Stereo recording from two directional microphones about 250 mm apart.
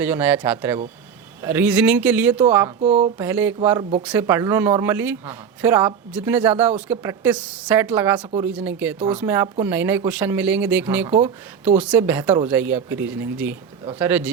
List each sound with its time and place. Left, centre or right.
0.0 s speech: centre
2.8 s speech: right
3.2 s speech: centre